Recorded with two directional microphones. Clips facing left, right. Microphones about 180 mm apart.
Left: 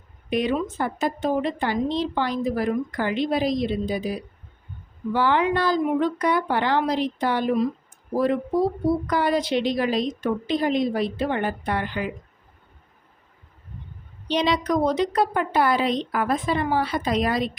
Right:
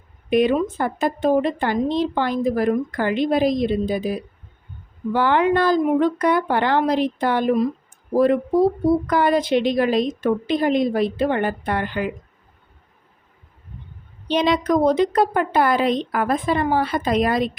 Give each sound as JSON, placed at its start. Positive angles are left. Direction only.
{"t": 0.3, "sound": "a woman's voice", "side_deg": -55}
{"t": 14.3, "sound": "a woman's voice", "side_deg": -50}